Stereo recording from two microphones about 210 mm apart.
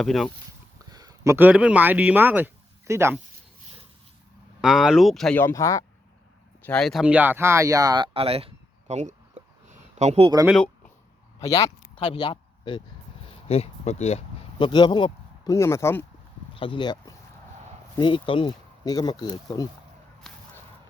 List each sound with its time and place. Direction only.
0.0 s speech: centre (ahead or behind)
0.9 s speech: 15° right (ahead or behind)
4.6 s speech: 5° right (ahead or behind); by 5.8 s 15° left (ahead or behind)
6.7 s speech: centre (ahead or behind); by 10.4 s 25° right (ahead or behind)
10.4 s a sound: centre (ahead or behind)
11.3 s speech: 15° left (ahead or behind)
13.2 s a sound: 30° left (ahead or behind)
14.6 s speech: 20° left (ahead or behind)
16.6 s speech: 25° left (ahead or behind)
20.3 s whip: centre (ahead or behind)